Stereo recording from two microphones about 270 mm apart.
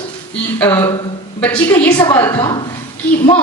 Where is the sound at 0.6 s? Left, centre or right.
Centre.